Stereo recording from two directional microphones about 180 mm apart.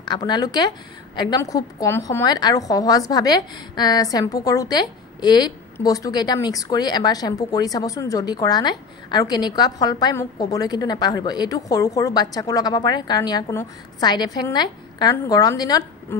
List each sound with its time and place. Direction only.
0.0 s a woman's voice: 25° left (ahead or behind)